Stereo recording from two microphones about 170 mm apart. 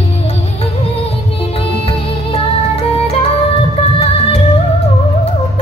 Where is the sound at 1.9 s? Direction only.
35° left (ahead or behind).